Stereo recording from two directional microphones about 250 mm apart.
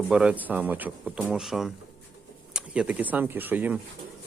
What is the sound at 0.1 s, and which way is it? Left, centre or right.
Speech, centre.